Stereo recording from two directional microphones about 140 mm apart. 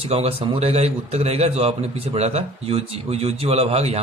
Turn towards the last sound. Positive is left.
turn(degrees=-45)  # may be behind; listen again after turning